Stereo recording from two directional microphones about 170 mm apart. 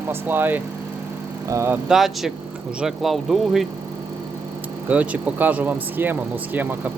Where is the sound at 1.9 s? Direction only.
Centre (ahead or behind).